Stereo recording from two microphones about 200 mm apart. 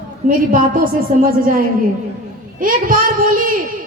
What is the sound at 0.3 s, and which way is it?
Child singing, 45° right (ahead or behind).